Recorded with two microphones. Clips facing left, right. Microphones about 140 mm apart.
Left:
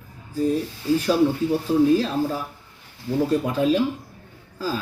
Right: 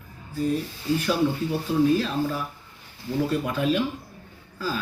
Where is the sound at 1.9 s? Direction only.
40° left (ahead or behind).